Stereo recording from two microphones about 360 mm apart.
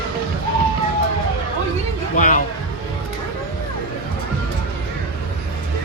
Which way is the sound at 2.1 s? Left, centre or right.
Left.